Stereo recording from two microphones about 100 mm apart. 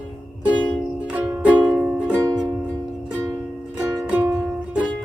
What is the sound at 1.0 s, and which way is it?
Music, 15° right (ahead or behind).